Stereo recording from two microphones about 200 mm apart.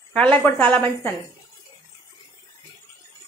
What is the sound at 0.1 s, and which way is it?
A woman's voice, 5° left (ahead or behind).